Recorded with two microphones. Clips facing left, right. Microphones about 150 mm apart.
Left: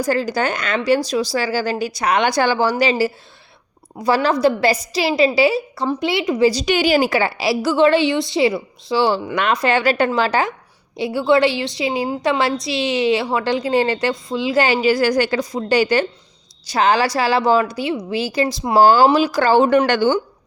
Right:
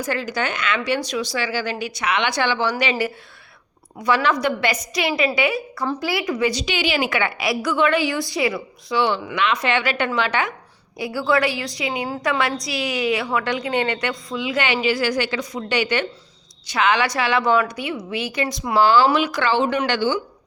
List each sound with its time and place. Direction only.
0.0 s a woman's voice: 35° left (ahead or behind)